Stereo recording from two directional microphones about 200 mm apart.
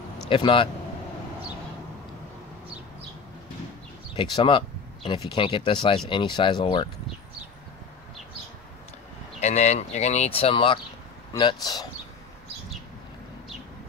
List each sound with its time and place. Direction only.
0.3 s speech: 25° left (ahead or behind)
4.1 s speech: 25° left (ahead or behind)
9.4 s speech: 35° left (ahead or behind)